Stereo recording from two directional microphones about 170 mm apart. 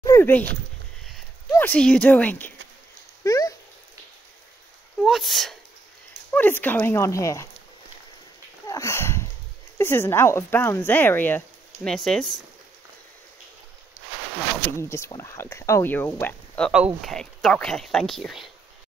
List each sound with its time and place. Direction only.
0.0 s dog: 15° left (ahead or behind)
1.5 s speech: 10° left (ahead or behind)
3.3 s a sound: 20° left (ahead or behind)
5.0 s speech: centre (ahead or behind); by 7.4 s 20° left (ahead or behind)
8.6 s sniff: 20° left (ahead or behind)
9.8 s speech: 15° left (ahead or behind)
14.7 s speech: 15° left (ahead or behind); by 18.5 s centre (ahead or behind)